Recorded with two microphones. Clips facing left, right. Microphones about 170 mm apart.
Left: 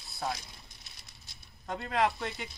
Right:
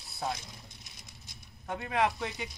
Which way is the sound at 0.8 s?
20° right (ahead or behind).